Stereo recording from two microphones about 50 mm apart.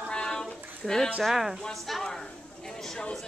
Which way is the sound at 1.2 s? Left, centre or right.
Centre.